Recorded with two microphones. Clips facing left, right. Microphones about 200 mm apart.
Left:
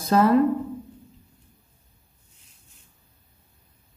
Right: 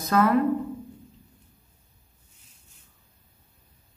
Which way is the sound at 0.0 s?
30° left (ahead or behind).